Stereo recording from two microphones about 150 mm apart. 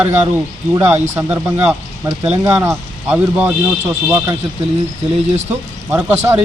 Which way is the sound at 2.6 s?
5° right (ahead or behind).